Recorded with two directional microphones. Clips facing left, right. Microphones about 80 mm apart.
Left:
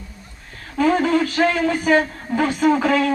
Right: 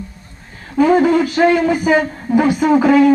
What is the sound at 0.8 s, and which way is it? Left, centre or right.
Speech, centre.